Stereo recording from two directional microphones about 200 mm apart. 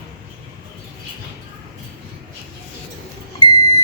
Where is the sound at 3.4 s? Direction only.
20° left (ahead or behind).